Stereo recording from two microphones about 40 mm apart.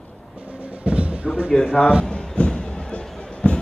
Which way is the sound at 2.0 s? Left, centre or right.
Left.